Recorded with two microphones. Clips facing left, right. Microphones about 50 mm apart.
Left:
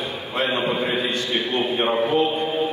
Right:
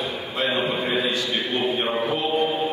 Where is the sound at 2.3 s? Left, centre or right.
Right.